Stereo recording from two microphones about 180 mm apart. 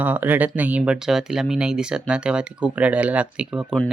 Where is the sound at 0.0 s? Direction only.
10° right (ahead or behind).